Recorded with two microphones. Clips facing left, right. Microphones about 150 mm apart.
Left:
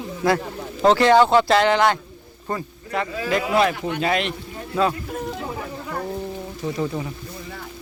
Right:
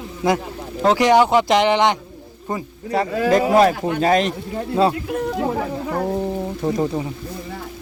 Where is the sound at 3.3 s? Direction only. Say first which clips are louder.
Right 5 dB; 40° right (ahead or behind).